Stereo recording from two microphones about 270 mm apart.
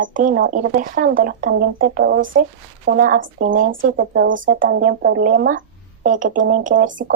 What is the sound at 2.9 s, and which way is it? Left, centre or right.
Speech, right.